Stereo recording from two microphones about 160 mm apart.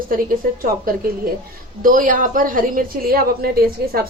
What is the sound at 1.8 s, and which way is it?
A woman's voice, 60° right (ahead or behind).